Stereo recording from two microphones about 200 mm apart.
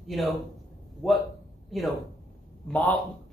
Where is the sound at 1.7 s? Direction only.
Centre (ahead or behind).